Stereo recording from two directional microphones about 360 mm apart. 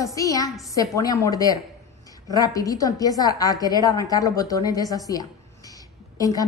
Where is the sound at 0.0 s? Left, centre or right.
Centre.